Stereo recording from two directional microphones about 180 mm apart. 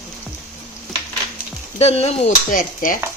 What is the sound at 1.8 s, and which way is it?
Speech, 35° left (ahead or behind).